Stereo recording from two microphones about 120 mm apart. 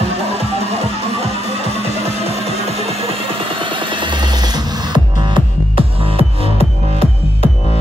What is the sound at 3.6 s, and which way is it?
Music, 45° right (ahead or behind).